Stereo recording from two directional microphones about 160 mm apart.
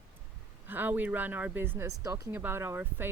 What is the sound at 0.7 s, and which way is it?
Speech, 10° right (ahead or behind).